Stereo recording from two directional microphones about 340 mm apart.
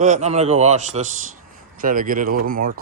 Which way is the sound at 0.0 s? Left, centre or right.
Right.